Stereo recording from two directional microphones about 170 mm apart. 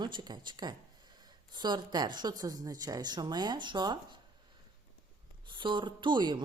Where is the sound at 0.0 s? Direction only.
25° right (ahead or behind).